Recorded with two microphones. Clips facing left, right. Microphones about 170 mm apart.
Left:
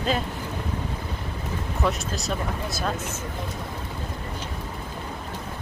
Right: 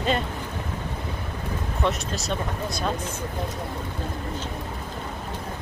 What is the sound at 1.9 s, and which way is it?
Speech, centre (ahead or behind).